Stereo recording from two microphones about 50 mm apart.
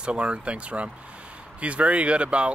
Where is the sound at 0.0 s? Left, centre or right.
Right.